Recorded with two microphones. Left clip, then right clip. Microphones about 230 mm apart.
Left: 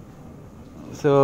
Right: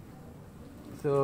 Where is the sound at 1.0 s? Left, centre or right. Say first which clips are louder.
Left 10 dB; left.